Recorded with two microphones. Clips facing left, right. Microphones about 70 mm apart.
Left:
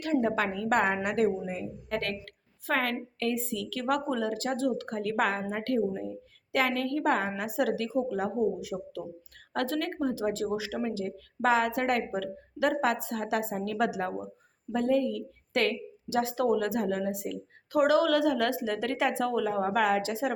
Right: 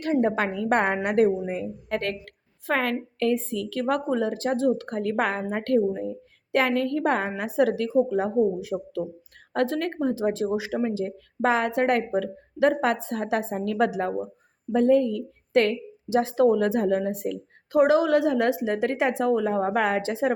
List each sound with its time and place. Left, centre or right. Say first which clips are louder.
0.0 s a woman's voice: right 4 dB; right
17.7 s a woman's voice: right 4 dB; right